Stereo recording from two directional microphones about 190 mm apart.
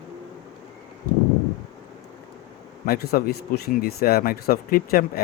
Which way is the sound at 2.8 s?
55° left (ahead or behind).